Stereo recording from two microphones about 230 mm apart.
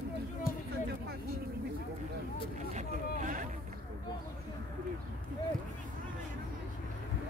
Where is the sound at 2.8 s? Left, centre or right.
Right.